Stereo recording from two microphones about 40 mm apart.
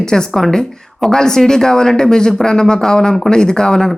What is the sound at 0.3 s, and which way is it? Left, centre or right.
Speech, centre.